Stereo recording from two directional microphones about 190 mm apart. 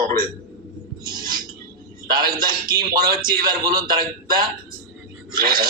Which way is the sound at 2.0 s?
50° right (ahead or behind).